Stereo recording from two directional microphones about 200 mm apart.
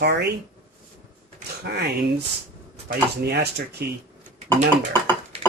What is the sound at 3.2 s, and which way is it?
Speech, 55° right (ahead or behind).